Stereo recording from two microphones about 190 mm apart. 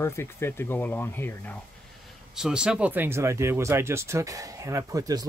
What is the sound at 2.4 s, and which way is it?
Speech, 5° right (ahead or behind).